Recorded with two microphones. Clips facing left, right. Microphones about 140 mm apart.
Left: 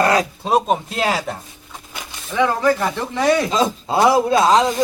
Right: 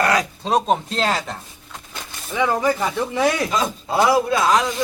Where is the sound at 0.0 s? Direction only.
30° left (ahead or behind).